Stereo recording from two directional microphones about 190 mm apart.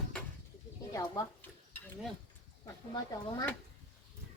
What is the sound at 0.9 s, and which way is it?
Dishes, 20° left (ahead or behind).